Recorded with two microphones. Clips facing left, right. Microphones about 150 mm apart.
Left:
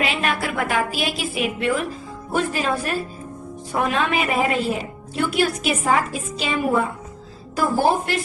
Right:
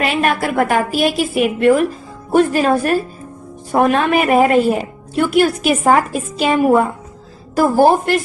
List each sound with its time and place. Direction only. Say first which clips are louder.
0.0 s a woman's voice: right 6 dB; 50° right (ahead or behind)